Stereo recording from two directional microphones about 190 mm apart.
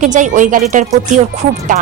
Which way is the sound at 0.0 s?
40° right (ahead or behind).